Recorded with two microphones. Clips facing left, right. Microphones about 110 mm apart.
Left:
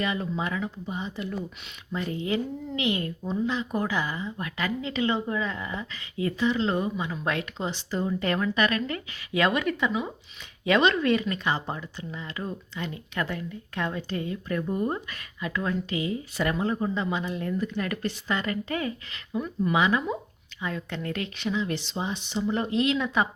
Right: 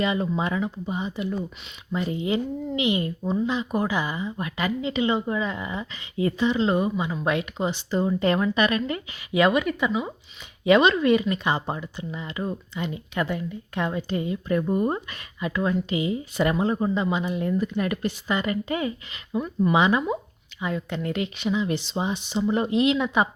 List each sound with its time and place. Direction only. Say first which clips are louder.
0.0 s speech: right 4 dB; 20° right (ahead or behind)